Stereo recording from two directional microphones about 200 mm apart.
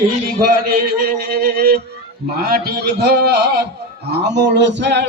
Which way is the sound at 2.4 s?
50° right (ahead or behind).